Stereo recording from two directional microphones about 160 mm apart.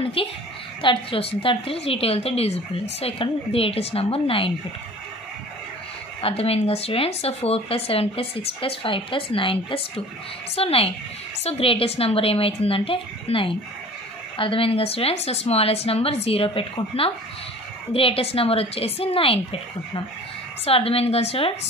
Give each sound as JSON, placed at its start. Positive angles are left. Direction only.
{"t": 0.0, "sound": "a woman's voice", "side_deg": 35}
{"t": 6.2, "sound": "speech", "side_deg": 40}